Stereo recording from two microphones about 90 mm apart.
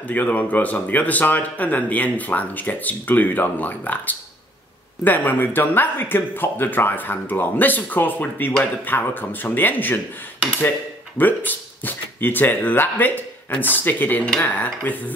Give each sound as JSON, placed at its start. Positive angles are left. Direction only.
{"t": 0.1, "sound": "speech", "side_deg": 15}
{"t": 11.1, "sound": "speech", "side_deg": 20}